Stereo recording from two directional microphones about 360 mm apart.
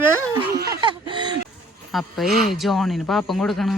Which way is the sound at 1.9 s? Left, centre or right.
Centre.